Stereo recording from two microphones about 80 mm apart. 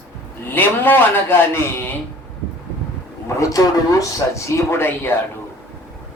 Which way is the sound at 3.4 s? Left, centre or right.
Left.